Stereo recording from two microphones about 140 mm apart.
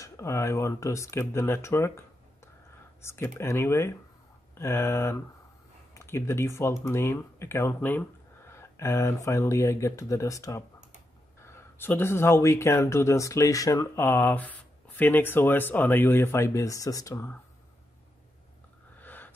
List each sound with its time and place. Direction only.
0.0 s speech: 20° left (ahead or behind)
3.0 s speech: 20° left (ahead or behind)
18.9 s a sound: 15° left (ahead or behind)